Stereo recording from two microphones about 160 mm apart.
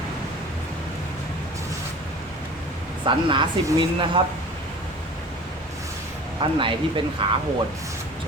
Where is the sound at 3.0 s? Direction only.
30° right (ahead or behind).